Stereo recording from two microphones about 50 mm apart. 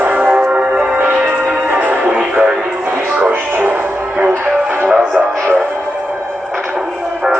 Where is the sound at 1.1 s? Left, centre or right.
Right.